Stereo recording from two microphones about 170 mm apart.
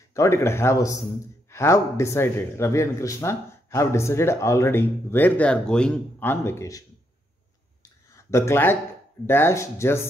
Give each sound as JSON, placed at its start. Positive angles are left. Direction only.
{"t": 0.1, "sound": "speech", "side_deg": 15}
{"t": 8.1, "sound": "speech", "side_deg": 15}